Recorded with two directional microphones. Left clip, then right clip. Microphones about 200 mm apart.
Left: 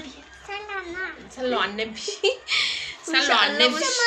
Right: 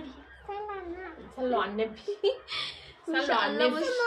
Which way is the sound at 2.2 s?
35° left (ahead or behind).